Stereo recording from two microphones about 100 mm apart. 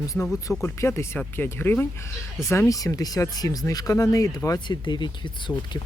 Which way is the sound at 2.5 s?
30° left (ahead or behind).